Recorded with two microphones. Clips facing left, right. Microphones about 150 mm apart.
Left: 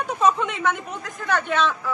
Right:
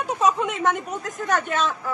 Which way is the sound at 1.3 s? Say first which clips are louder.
Left 1 dB; 45° right (ahead or behind).